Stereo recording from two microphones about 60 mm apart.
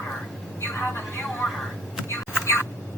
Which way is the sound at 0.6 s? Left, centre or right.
Left.